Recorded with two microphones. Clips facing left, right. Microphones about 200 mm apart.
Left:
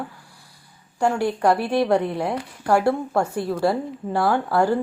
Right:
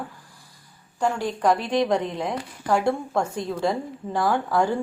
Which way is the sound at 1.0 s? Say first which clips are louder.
Left 3 dB; 10° left (ahead or behind).